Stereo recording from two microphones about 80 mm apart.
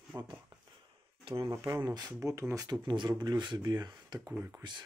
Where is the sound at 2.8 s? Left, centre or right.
Right.